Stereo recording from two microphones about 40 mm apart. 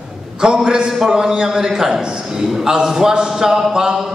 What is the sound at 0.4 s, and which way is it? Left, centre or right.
A man's voice, centre.